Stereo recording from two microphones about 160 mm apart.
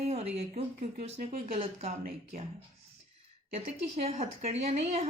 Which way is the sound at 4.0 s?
40° right (ahead or behind).